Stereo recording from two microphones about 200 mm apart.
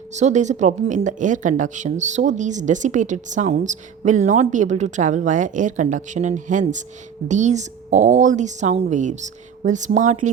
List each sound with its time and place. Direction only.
0.1 s speech: 35° right (ahead or behind)